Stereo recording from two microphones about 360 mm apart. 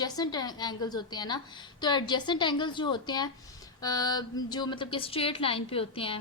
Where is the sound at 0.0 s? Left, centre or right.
Centre.